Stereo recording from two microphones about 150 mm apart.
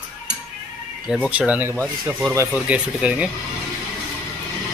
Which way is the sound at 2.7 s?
10° right (ahead or behind).